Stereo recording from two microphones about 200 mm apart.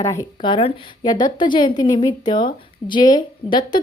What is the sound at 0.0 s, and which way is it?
A woman's voice, 15° left (ahead or behind).